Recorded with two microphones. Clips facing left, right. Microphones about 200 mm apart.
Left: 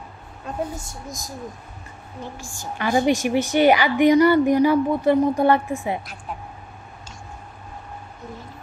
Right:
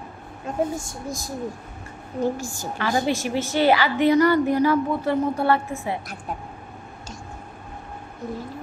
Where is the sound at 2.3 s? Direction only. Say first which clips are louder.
Right 6 dB; 40° right (ahead or behind).